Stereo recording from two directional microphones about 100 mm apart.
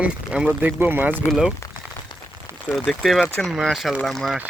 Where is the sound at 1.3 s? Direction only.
5° right (ahead or behind).